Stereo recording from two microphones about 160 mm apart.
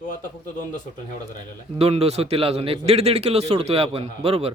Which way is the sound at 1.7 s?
40° right (ahead or behind).